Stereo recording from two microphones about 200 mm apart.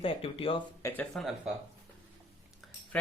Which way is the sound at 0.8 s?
10° left (ahead or behind).